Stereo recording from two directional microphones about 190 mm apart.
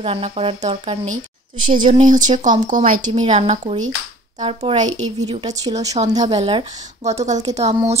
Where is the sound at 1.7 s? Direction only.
45° right (ahead or behind).